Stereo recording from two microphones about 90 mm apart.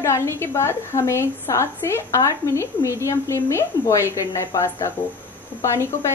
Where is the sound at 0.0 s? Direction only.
30° left (ahead or behind).